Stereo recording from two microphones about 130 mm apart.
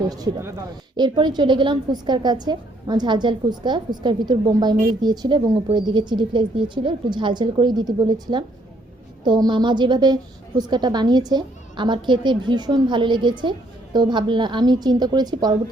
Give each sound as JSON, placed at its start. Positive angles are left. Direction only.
{"t": 0.1, "sound": "speech", "side_deg": -25}
{"t": 0.9, "sound": "a woman's voice", "side_deg": -35}